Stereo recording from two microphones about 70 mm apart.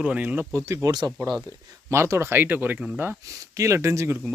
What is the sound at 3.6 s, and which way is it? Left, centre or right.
Speech, right.